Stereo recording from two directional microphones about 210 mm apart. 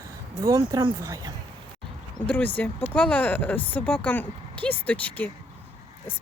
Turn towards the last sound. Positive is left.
turn(degrees=5)  # may be behind; listen again after turning